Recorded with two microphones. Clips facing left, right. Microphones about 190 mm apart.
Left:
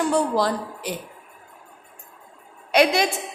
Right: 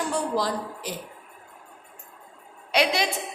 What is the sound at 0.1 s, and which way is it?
Speech, 60° left (ahead or behind).